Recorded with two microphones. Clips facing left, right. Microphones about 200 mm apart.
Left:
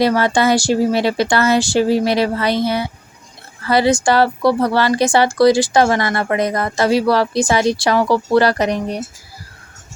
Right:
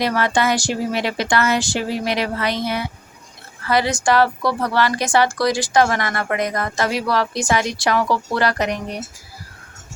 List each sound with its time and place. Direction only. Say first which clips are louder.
0.0 s a woman's voice: left 5 dB; 30° left (ahead or behind)